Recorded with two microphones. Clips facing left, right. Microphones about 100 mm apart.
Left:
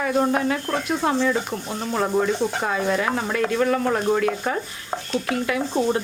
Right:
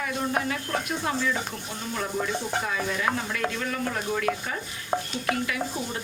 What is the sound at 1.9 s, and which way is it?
A man's voice, 45° left (ahead or behind).